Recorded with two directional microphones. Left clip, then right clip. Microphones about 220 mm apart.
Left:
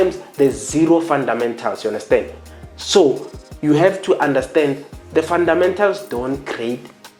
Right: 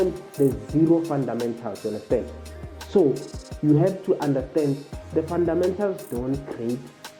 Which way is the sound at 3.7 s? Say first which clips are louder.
Left 8 dB; 10° left (ahead or behind).